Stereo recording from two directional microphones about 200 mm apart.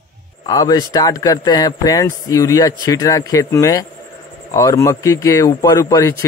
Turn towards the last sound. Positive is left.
turn(degrees=15)  # may be behind; listen again after turning